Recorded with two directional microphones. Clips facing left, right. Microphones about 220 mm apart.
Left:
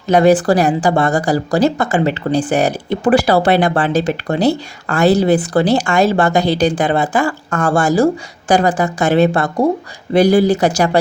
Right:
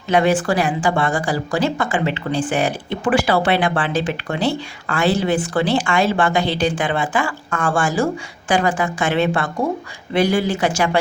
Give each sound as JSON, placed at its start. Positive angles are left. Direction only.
{"t": 0.1, "sound": "speech", "side_deg": 40}